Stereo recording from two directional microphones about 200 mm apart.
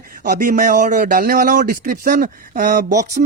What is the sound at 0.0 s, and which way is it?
Speech, 40° right (ahead or behind).